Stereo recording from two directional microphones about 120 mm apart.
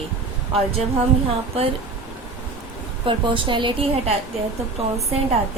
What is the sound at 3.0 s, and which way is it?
Speech, 45° right (ahead or behind).